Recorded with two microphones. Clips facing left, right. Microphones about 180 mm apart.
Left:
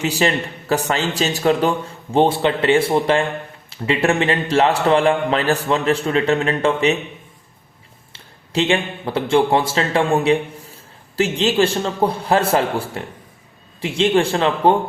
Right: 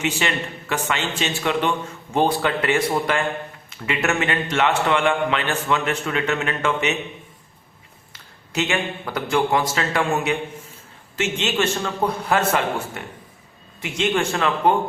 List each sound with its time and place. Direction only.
0.0 s a man's voice: 35° left (ahead or behind)
8.1 s a man's voice: 30° left (ahead or behind)